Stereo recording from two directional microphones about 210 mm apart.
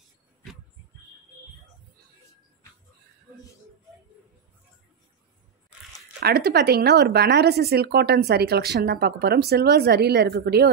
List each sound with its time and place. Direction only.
6.2 s speech: 50° right (ahead or behind)